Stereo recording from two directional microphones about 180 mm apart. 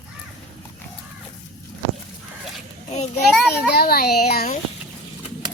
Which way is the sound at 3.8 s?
60° left (ahead or behind).